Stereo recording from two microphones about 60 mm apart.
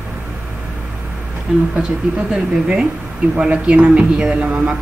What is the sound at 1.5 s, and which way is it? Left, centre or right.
Speech, right.